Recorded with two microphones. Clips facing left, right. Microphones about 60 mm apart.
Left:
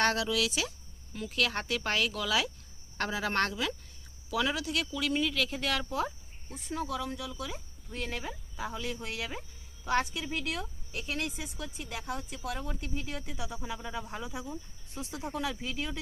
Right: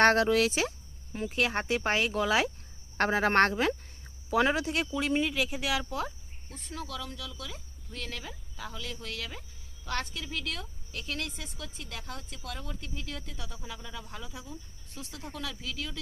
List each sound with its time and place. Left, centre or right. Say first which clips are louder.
0.0 s speech: right 6 dB; right; by 14.0 s left
14.1 s cricket: left 4 dB; left